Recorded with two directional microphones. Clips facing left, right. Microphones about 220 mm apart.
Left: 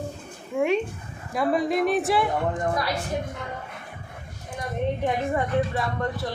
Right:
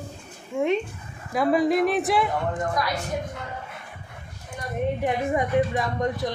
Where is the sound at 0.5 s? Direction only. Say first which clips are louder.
Even; 15° left (ahead or behind).